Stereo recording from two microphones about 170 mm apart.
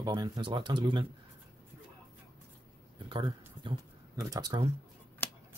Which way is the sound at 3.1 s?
30° right (ahead or behind).